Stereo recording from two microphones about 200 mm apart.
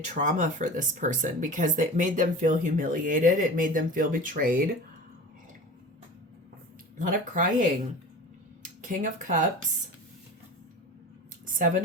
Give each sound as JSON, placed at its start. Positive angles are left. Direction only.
{"t": 0.0, "sound": "speech", "side_deg": -40}
{"t": 6.9, "sound": "speech", "side_deg": -40}
{"t": 8.8, "sound": "speech", "side_deg": -40}
{"t": 11.4, "sound": "a sound", "side_deg": -40}